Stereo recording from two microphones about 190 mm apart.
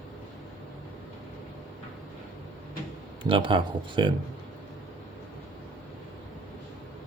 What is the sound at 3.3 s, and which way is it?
Speech, 25° right (ahead or behind).